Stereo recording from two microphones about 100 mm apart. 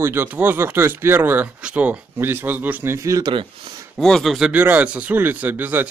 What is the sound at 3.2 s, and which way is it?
Speech, 55° right (ahead or behind).